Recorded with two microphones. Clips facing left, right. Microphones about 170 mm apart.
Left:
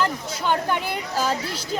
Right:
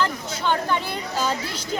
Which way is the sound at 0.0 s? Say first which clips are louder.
Even; 10° left (ahead or behind).